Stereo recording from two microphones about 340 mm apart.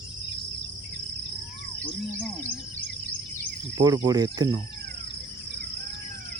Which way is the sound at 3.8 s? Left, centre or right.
Centre.